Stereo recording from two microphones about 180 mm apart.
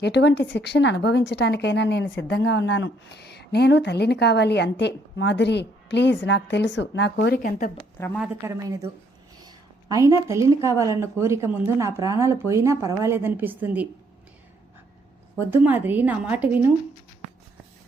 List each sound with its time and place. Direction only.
0.0 s speech: 75° left (ahead or behind)
7.9 s a woman's voice: 15° left (ahead or behind)
8.4 s a woman's voice: 20° right (ahead or behind)
9.9 s a woman's voice: 15° right (ahead or behind)
15.4 s a woman's voice: 10° right (ahead or behind)